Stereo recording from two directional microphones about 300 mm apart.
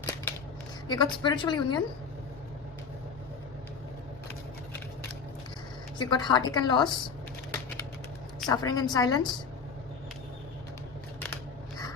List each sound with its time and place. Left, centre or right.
0.9 s a woman's voice: centre
6.0 s a woman's voice: centre
8.4 s a woman's voice: centre